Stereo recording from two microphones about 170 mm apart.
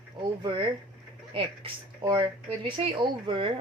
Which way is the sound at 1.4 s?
30° right (ahead or behind).